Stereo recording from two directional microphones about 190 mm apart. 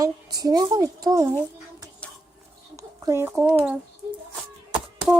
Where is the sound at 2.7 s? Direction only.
15° right (ahead or behind).